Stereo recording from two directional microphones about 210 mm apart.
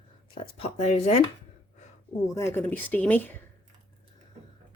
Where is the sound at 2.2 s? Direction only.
15° left (ahead or behind).